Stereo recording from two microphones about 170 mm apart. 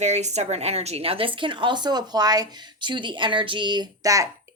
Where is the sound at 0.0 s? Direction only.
40° right (ahead or behind).